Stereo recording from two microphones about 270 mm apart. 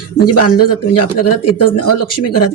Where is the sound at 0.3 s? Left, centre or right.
Left.